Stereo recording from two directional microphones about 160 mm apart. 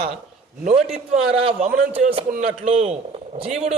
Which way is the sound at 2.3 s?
50° right (ahead or behind).